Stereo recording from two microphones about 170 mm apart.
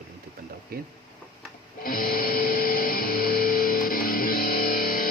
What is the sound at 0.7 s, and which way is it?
Speech, 65° right (ahead or behind).